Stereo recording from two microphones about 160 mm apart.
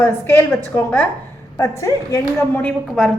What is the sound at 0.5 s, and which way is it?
Speech, 10° left (ahead or behind).